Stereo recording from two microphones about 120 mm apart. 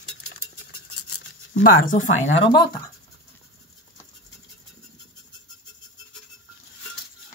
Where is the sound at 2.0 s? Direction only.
85° left.